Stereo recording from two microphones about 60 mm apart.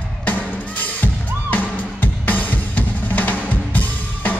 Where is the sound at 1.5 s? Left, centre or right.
Left.